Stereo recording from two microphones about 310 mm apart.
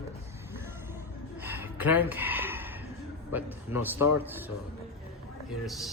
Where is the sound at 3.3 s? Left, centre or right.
Centre.